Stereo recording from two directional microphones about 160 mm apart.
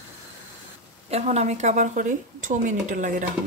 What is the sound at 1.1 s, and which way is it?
Speech, 45° right (ahead or behind).